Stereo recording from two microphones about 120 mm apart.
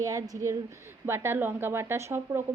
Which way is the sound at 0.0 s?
30° right (ahead or behind).